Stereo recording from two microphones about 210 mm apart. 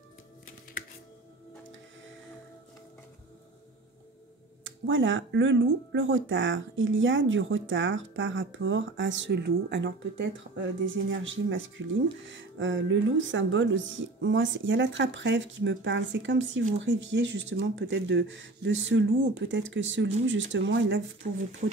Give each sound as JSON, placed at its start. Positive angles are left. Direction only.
{"t": 4.6, "sound": "speech", "side_deg": -65}